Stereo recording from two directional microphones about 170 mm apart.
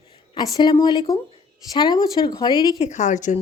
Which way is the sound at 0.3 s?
25° left (ahead or behind).